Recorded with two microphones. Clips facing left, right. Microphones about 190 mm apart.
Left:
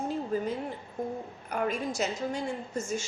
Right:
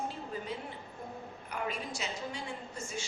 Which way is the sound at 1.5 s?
45° left (ahead or behind).